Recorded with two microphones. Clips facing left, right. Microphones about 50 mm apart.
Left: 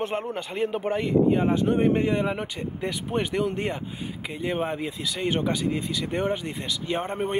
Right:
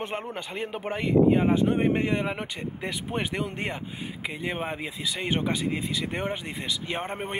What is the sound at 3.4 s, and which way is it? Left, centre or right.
Speech, centre.